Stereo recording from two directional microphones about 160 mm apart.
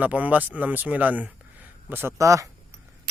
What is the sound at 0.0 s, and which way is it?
Speech, 10° right (ahead or behind).